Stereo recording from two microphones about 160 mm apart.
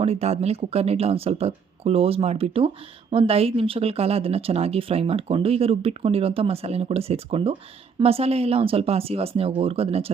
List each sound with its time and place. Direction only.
0.0 s speech: 40° right (ahead or behind)